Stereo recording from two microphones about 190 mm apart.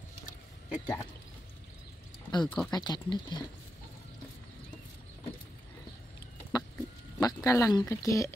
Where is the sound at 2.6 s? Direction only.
20° left (ahead or behind).